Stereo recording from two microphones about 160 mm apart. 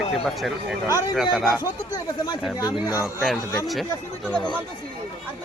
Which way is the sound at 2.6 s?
20° left (ahead or behind).